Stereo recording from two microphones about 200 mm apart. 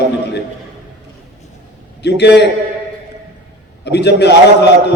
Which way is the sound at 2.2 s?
55° left (ahead or behind).